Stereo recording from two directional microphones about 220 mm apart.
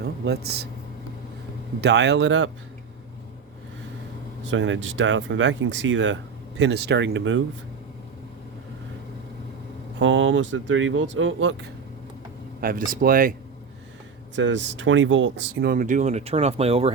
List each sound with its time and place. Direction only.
0.0 s speech: 45° right (ahead or behind)
1.8 s speech: 50° right (ahead or behind)
4.5 s speech: 60° right (ahead or behind)
10.0 s speech: 60° right (ahead or behind)
12.5 s speech: 40° right (ahead or behind)
14.3 s speech: 55° right (ahead or behind); by 16.9 s 25° right (ahead or behind)